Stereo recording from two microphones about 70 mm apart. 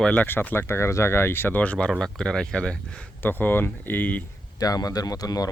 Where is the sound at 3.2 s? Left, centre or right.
Left.